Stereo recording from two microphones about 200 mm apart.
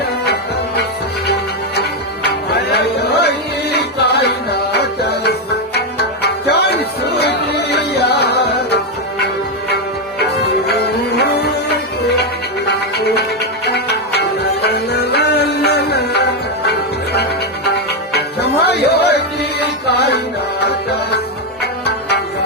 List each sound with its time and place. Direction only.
1.3 s music: 55° left (ahead or behind)
10.8 s music: 55° left (ahead or behind)
18.1 s music: 55° left (ahead or behind)